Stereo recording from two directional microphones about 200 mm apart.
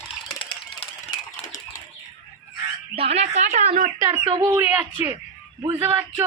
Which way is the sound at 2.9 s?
30° right (ahead or behind).